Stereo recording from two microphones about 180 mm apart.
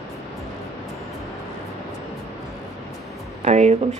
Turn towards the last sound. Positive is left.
turn(degrees=-40)  # may be behind; listen again after turning